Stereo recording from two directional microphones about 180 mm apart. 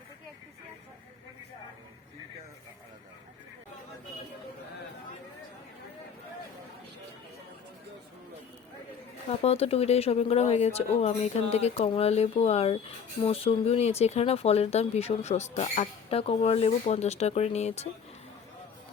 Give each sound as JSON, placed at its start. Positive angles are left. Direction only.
{"t": 9.4, "sound": "speech", "side_deg": 35}